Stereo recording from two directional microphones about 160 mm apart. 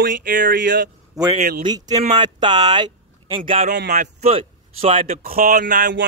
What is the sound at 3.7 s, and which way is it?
Speech, 90° right.